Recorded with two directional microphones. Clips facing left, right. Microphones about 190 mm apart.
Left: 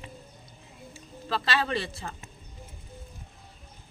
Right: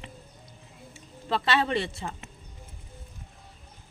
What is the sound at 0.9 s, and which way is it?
Speech, 25° right (ahead or behind).